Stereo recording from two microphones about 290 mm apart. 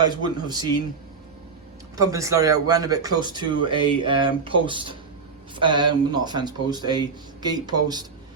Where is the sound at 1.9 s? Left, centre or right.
Centre.